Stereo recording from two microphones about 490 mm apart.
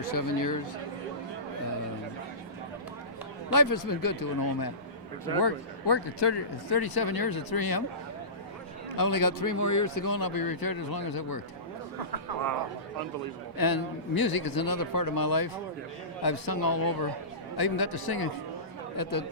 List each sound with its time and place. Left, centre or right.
0.1 s a man's voice: left
3.5 s a man's voice: left
9.0 s speech: left
13.6 s a man's voice: left